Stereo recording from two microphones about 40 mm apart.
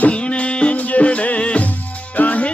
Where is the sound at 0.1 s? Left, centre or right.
Left.